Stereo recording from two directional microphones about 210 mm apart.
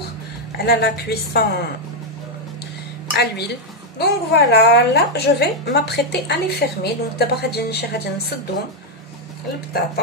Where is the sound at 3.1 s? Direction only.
50° left (ahead or behind).